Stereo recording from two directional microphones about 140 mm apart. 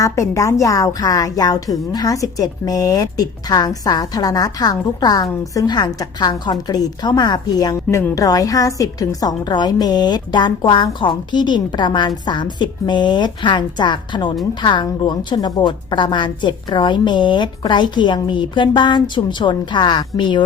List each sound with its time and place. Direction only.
0.0 s a woman's voice: 20° left (ahead or behind)